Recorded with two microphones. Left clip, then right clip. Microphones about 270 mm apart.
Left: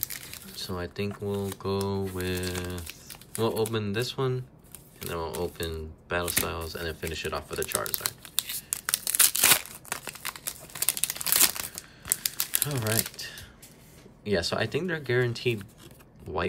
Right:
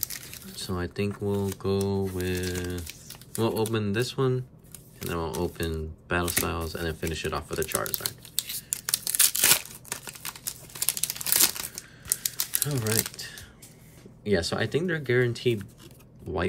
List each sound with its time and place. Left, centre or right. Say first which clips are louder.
0.5 s speech: right 1 dB; centre
8.0 s crumpling: left 1 dB; centre
12.6 s speech: right 1 dB; centre
13.2 s a sound: left 1 dB; centre
14.2 s speech: right 1 dB; centre